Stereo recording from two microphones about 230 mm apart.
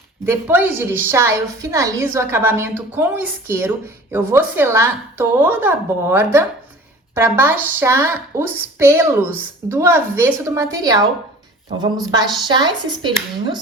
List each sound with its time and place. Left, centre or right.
0.3 s a woman's voice: centre